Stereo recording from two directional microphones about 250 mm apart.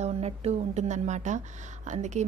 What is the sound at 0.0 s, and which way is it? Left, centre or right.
A woman's voice, right.